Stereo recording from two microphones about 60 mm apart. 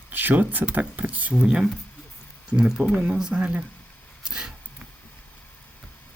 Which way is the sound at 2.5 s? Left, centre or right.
Centre.